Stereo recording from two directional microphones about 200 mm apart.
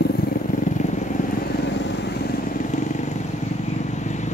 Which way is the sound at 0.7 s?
35° left (ahead or behind).